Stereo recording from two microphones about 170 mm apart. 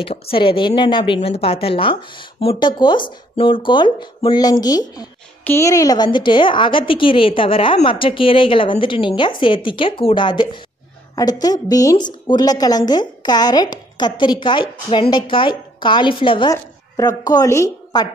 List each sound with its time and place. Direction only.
0.0 s a woman's voice: 35° left (ahead or behind)
16.5 s speech: 20° left (ahead or behind)